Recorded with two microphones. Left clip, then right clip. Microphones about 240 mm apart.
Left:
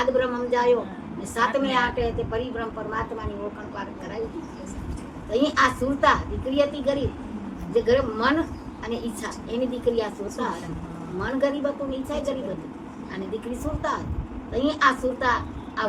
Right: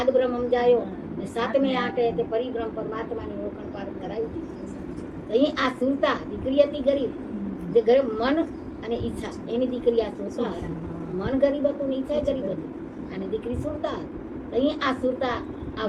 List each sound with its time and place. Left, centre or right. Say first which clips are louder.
0.0 s a woman's voice: right 1 dB; left
5.3 s a woman's voice: left 2 dB; left
14.5 s a woman's voice: left 3 dB; centre